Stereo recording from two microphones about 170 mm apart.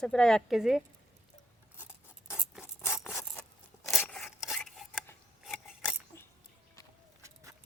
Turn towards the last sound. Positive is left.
turn(degrees=-20)  # may be behind; listen again after turning